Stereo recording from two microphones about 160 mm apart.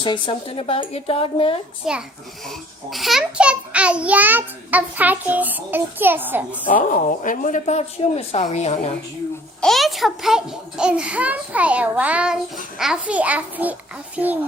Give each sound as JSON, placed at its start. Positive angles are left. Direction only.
{"t": 0.0, "sound": "speech", "side_deg": 30}
{"t": 1.8, "sound": "a child's voice", "side_deg": -5}
{"t": 6.7, "sound": "speech", "side_deg": 55}
{"t": 9.6, "sound": "a child's voice", "side_deg": 0}